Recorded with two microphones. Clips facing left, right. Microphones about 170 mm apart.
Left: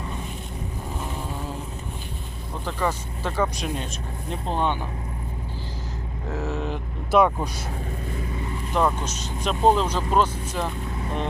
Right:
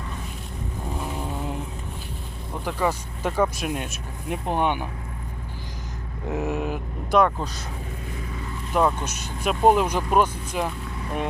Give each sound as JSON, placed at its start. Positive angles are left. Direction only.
{"t": 2.6, "sound": "speech", "side_deg": -10}
{"t": 6.2, "sound": "speech", "side_deg": -15}
{"t": 7.1, "sound": "speech", "side_deg": 10}
{"t": 8.7, "sound": "speech", "side_deg": -5}